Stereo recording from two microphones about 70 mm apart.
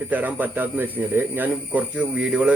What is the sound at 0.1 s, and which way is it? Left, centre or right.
Speech, right.